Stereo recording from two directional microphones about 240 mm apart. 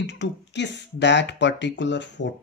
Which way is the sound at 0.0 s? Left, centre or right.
Left.